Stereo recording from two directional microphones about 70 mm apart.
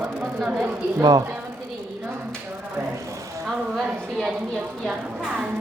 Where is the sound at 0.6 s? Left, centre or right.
Right.